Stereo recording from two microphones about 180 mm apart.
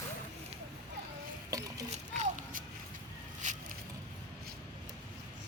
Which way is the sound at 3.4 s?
45° right (ahead or behind).